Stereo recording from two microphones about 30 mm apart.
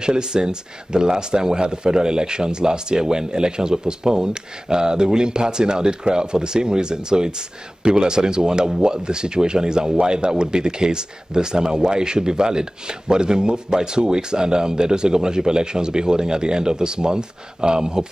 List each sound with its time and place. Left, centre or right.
0.0 s speech: right